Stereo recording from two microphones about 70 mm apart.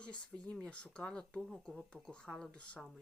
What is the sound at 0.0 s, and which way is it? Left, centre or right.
Speech, centre.